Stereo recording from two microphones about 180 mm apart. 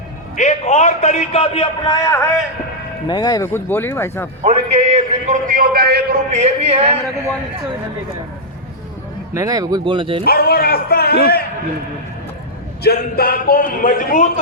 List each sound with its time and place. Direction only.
0.3 s a man's voice: 40° left (ahead or behind); by 4.3 s 15° left (ahead or behind)
4.4 s a man's voice: 35° right (ahead or behind); by 6.1 s 60° right (ahead or behind)
6.3 s a man's voice: 35° right (ahead or behind)
9.3 s speech: 20° right (ahead or behind)
10.2 s a man's voice: 55° left (ahead or behind)
12.8 s a man's voice: 60° left (ahead or behind)